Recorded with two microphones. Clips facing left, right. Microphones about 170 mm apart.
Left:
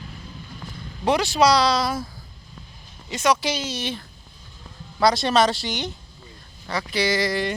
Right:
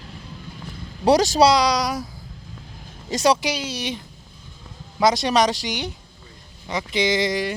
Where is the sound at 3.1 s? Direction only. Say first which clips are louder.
Right 3 dB; 35° right (ahead or behind).